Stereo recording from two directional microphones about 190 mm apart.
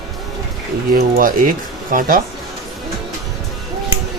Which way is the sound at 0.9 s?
50° right (ahead or behind).